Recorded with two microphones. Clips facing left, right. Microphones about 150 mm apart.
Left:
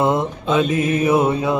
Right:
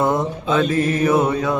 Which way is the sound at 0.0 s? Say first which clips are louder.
Left 1 dB; 25° left (ahead or behind).